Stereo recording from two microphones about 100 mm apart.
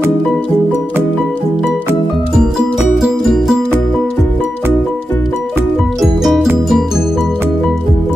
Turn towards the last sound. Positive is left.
turn(degrees=-5)  # may be behind; listen again after turning